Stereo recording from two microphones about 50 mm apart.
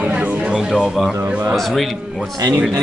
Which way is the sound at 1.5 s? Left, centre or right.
Centre.